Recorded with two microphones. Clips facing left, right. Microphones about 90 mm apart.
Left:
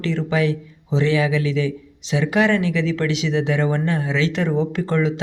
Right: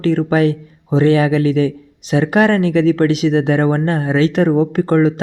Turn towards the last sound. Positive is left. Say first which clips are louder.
# right 7 dB
turn(degrees=-45)  # may be behind; listen again after turning